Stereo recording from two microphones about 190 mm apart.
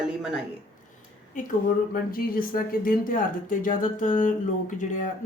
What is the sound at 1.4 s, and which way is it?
A woman's voice, 45° left (ahead or behind).